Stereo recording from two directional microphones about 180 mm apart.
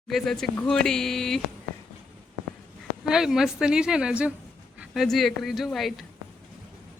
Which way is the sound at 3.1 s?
5° right (ahead or behind).